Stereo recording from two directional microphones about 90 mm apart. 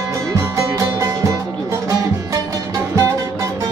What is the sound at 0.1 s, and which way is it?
Music, 35° right (ahead or behind).